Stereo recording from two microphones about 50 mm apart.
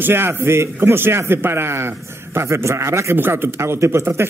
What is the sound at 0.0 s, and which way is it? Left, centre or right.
A man's voice, right.